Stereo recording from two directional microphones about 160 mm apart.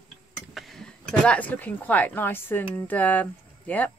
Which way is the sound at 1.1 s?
10° left (ahead or behind).